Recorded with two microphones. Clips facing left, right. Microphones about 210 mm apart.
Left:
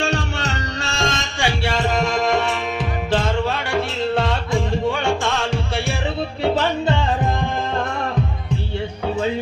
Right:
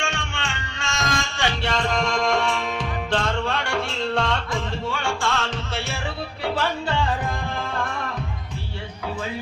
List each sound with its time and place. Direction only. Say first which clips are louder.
0.0 s music: left 7 dB; 40° left (ahead or behind); by 7.3 s 20° left (ahead or behind)